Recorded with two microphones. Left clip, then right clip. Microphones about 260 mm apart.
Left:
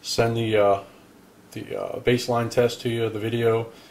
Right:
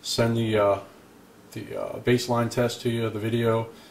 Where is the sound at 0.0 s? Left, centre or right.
Centre.